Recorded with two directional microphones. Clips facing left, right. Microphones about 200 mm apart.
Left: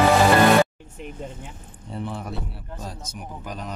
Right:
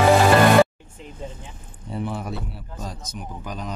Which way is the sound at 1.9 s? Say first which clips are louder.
Right 2 dB; 5° right (ahead or behind).